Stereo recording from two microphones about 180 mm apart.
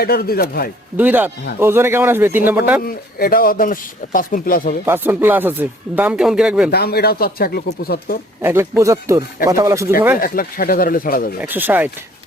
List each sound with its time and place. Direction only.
0.0 s speech: 60° left (ahead or behind)
0.9 s speech: 10° right (ahead or behind)
2.8 s speech: 55° left (ahead or behind)
4.9 s speech: 10° right (ahead or behind)
6.7 s speech: 60° left (ahead or behind)
8.4 s speech: 10° right (ahead or behind)
10.2 s speech: 55° left (ahead or behind)
11.3 s speech: 10° right (ahead or behind)